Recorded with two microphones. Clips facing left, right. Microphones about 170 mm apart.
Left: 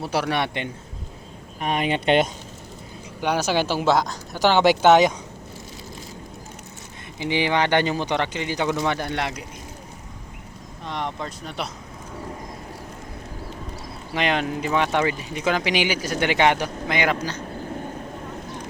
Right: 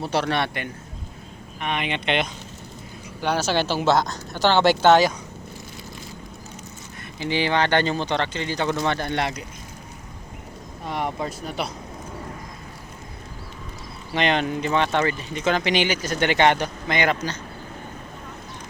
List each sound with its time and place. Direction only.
0.0 s speech: 10° left (ahead or behind)
1.6 s speech: 40° left (ahead or behind)
3.2 s speech: 15° left (ahead or behind)
7.2 s speech: 15° left (ahead or behind)
10.8 s speech: 5° right (ahead or behind)
14.1 s speech: 5° left (ahead or behind)